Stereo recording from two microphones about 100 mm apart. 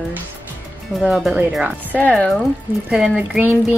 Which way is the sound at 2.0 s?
15° left (ahead or behind).